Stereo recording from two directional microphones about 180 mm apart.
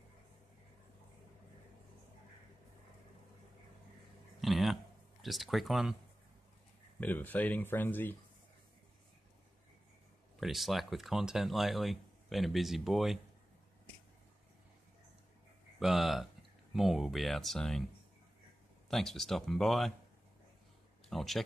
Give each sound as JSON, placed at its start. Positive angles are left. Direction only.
{"t": 4.4, "sound": "a sound", "side_deg": 0}
{"t": 5.2, "sound": "speech", "side_deg": 0}
{"t": 7.0, "sound": "speech", "side_deg": 10}
{"t": 10.4, "sound": "speech", "side_deg": 0}
{"t": 15.8, "sound": "speech", "side_deg": 0}
{"t": 18.9, "sound": "speech", "side_deg": 0}
{"t": 21.1, "sound": "speech", "side_deg": 0}